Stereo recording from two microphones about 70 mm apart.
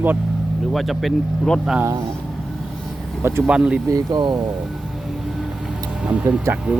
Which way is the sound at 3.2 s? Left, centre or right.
Right.